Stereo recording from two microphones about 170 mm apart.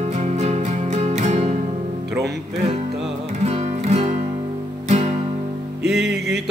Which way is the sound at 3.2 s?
40° right (ahead or behind).